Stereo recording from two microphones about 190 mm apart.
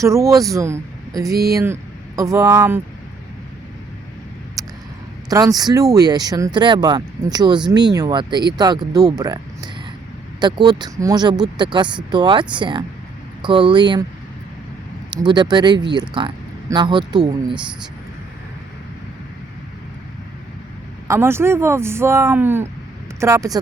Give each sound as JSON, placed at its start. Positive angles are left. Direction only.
{"t": 0.0, "sound": "speech", "side_deg": -15}
{"t": 4.6, "sound": "a sound", "side_deg": -20}
{"t": 5.3, "sound": "speech", "side_deg": -20}
{"t": 15.1, "sound": "speech", "side_deg": -25}
{"t": 21.1, "sound": "speech", "side_deg": -15}